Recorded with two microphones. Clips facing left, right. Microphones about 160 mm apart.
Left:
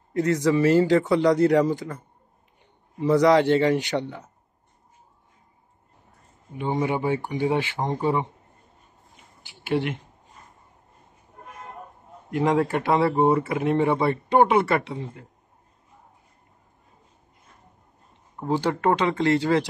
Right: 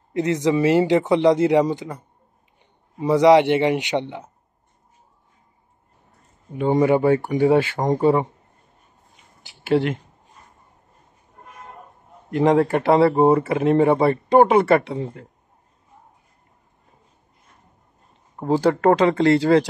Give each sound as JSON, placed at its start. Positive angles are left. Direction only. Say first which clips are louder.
{"t": 0.1, "sound": "speech", "louder": "right 1 dB", "side_deg": -20}
{"t": 6.6, "sound": "speech", "louder": "right 8 dB", "side_deg": -50}
{"t": 12.3, "sound": "speech", "louder": "right 5 dB", "side_deg": -30}
{"t": 13.4, "sound": "speech", "louder": "right 5 dB", "side_deg": -30}
{"t": 18.4, "sound": "speech", "louder": "right 6 dB", "side_deg": -40}